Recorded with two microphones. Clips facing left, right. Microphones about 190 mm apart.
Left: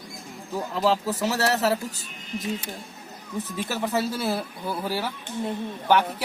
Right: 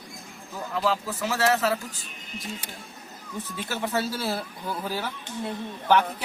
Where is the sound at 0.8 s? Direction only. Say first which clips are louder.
Left 3 dB; 40° left (ahead or behind).